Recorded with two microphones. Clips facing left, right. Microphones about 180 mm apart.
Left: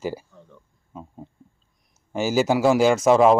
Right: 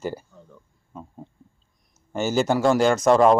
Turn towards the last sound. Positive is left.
turn(degrees=5)  # may be behind; listen again after turning